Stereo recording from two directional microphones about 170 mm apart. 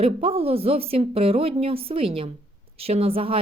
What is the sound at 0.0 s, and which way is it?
A woman's voice, 35° right (ahead or behind).